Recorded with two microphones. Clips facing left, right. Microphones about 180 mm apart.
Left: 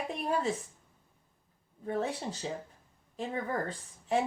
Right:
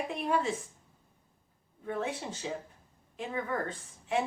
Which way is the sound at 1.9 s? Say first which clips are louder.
Left 2 dB; 35° left (ahead or behind).